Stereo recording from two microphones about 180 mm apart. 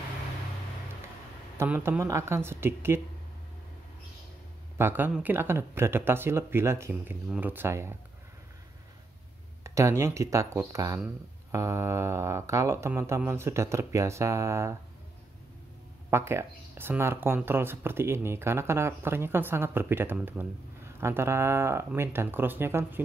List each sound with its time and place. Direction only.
1.6 s speech: 15° right (ahead or behind)
4.7 s speech: 10° right (ahead or behind)
9.6 s speech: 15° right (ahead or behind)
16.1 s speech: 15° right (ahead or behind)